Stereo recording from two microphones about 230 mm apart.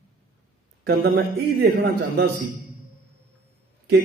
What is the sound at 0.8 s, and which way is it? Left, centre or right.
Speech, right.